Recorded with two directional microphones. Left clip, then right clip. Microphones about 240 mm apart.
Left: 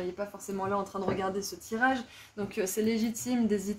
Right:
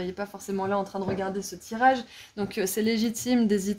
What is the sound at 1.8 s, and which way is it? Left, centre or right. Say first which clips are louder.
Speech: right 7 dB; right.